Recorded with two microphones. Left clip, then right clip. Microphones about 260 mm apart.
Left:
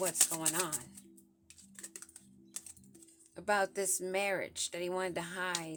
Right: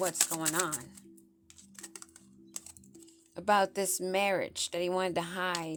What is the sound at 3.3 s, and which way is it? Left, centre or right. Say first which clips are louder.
Speech: right 5 dB; right.